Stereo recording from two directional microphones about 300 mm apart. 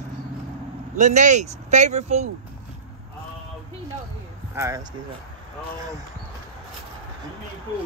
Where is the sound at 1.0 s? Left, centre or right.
Right.